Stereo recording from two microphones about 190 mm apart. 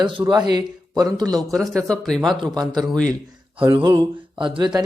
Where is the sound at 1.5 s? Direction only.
Centre (ahead or behind).